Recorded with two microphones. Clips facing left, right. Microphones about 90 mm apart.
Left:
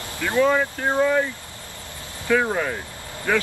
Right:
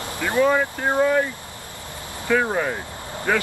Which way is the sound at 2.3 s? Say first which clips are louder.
Even; 5° right (ahead or behind).